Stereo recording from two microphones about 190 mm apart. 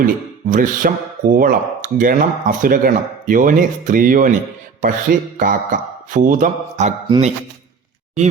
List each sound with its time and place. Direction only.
0.0 s speech: 45° right (ahead or behind)
5.4 s a man's voice: 45° right (ahead or behind)